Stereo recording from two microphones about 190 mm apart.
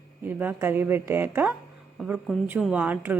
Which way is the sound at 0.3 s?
10° right (ahead or behind).